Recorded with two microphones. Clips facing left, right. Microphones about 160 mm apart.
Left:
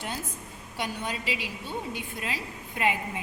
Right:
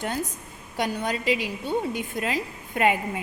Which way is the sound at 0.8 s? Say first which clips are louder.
Right 6 dB; 45° right (ahead or behind).